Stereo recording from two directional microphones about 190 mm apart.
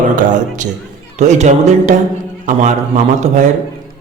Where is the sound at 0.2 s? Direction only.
40° right (ahead or behind).